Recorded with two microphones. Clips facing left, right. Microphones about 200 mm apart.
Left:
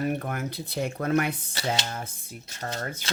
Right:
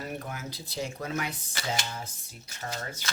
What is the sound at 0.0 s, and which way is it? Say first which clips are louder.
Speech: left 8 dB; 60° left (ahead or behind).